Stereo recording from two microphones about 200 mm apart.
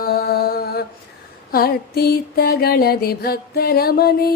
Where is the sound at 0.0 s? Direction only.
50° left (ahead or behind).